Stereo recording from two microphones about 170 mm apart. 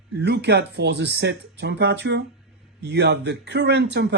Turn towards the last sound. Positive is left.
turn(degrees=-85)